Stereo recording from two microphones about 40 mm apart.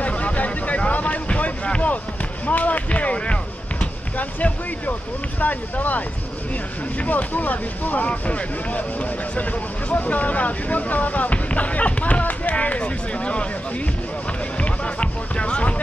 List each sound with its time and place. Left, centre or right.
0.0 s vehicle: left
2.4 s speech: left
14.6 s music: left